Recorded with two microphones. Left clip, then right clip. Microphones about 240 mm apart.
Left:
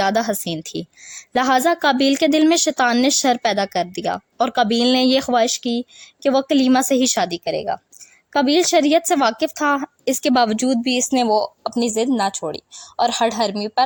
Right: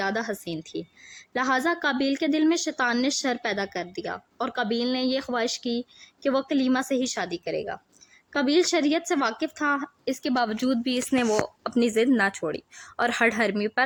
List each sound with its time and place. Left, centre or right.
0.0 s a woman's voice: left
11.6 s a woman's voice: centre